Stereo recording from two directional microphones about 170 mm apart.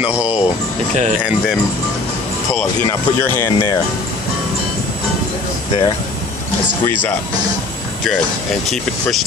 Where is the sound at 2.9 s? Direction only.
15° left (ahead or behind).